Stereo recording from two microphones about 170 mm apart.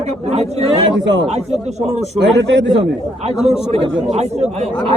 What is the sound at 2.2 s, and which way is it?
Speech, 90° right.